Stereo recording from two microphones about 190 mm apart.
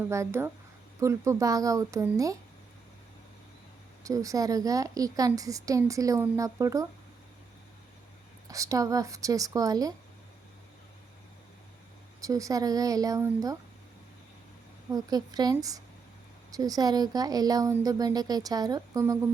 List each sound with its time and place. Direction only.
0.1 s a woman's voice: 15° right (ahead or behind)
4.0 s a woman's voice: 15° right (ahead or behind)
8.4 s a woman's voice: 15° right (ahead or behind)
12.2 s speech: 15° right (ahead or behind)
14.9 s speech: 20° right (ahead or behind)